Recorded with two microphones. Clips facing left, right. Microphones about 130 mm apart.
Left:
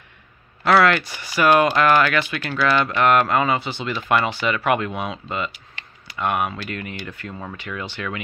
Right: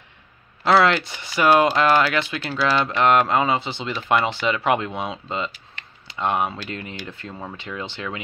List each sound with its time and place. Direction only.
0.7 s speech: 20° right (ahead or behind)